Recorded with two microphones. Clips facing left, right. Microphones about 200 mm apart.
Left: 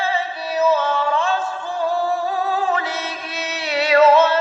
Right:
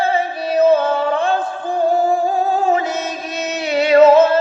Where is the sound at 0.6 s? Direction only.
55° right (ahead or behind).